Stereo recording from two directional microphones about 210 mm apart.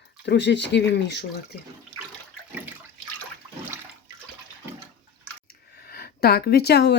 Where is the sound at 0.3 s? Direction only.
55° left (ahead or behind).